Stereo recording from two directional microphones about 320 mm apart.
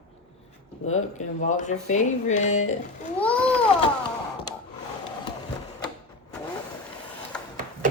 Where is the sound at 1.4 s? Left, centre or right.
Left.